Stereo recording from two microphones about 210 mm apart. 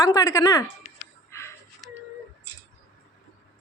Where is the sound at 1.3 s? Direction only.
15° left (ahead or behind).